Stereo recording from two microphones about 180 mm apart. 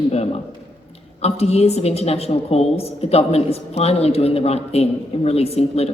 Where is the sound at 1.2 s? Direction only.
35° left (ahead or behind).